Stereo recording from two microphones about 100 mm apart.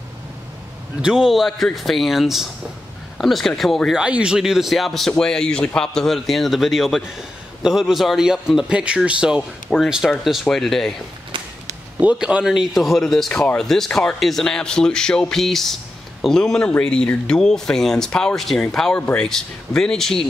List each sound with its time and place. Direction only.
1.0 s speech: 5° right (ahead or behind)
4.0 s speech: 10° right (ahead or behind)
12.0 s speech: 10° right (ahead or behind); by 20.2 s 5° left (ahead or behind)